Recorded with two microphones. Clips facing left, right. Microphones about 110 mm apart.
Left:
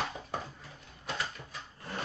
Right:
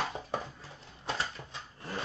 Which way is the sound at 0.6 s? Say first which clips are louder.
Right 1 dB; 30° right (ahead or behind).